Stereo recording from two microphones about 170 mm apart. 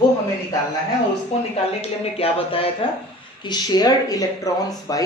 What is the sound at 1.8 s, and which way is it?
Speech, 35° left (ahead or behind).